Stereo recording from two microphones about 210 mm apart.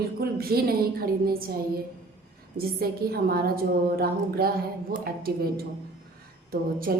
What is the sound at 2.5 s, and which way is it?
A woman's voice, 45° right (ahead or behind).